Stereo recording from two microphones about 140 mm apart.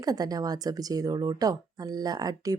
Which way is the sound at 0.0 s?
25° right (ahead or behind).